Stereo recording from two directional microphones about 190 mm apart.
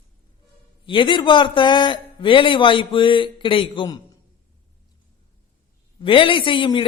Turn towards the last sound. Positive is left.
turn(degrees=25)  # may be behind; listen again after turning